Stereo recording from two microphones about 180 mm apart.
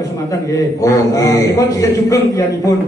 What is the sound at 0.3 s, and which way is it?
A man's voice, 15° left (ahead or behind).